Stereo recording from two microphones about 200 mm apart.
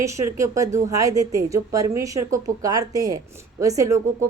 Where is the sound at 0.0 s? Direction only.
15° right (ahead or behind).